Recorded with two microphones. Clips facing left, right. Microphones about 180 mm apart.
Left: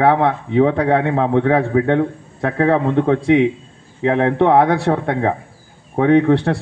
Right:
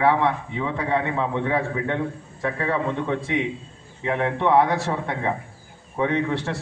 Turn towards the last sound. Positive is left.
turn(degrees=60)  # may be behind; listen again after turning